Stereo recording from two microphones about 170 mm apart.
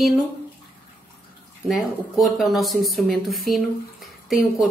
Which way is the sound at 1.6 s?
Centre (ahead or behind).